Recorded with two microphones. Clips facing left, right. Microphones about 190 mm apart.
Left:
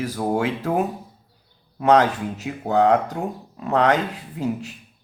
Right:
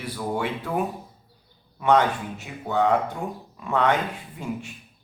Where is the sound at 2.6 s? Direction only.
40° left (ahead or behind).